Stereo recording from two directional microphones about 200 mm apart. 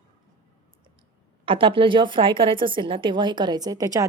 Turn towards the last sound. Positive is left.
turn(degrees=-20)  # may be behind; listen again after turning